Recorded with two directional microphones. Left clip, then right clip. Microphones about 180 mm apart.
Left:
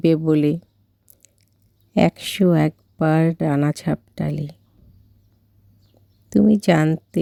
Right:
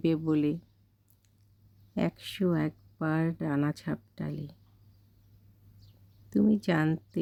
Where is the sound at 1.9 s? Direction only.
45° left (ahead or behind).